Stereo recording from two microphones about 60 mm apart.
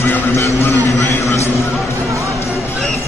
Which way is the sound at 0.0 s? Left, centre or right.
Left.